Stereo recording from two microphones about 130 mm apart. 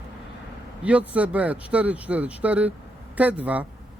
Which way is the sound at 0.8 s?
10° right (ahead or behind).